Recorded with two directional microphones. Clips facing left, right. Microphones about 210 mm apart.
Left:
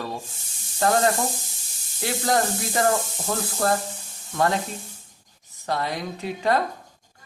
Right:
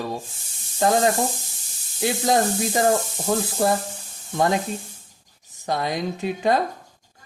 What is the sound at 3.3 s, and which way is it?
Sizzle, 20° right (ahead or behind).